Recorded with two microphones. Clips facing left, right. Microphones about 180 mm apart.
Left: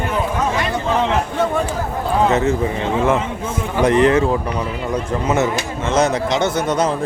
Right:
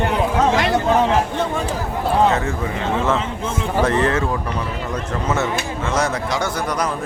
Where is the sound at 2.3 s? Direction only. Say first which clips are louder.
Left 5 dB; 20° left (ahead or behind).